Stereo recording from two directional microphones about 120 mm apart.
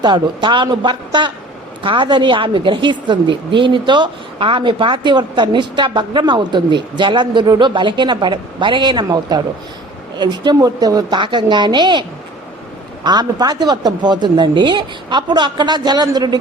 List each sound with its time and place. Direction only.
0.0 s a woman's voice: 40° right (ahead or behind)
13.1 s a woman's voice: 35° right (ahead or behind)